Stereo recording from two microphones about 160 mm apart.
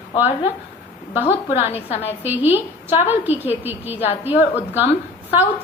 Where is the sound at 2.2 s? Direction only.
10° right (ahead or behind).